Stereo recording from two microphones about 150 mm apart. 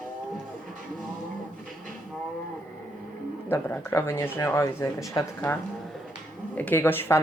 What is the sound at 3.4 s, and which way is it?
Speech, 15° left (ahead or behind).